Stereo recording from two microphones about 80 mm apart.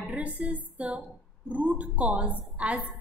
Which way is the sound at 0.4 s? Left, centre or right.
Centre.